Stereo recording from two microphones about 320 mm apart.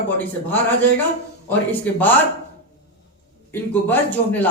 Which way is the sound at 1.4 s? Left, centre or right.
Centre.